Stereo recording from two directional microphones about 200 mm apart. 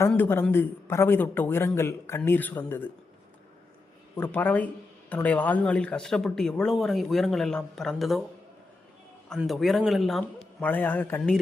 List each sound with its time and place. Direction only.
0.1 s a man's voice: 10° left (ahead or behind)
4.2 s a man's voice: 10° left (ahead or behind)
9.3 s a man's voice: centre (ahead or behind)